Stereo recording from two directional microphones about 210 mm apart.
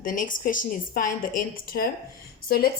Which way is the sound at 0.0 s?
40° left (ahead or behind).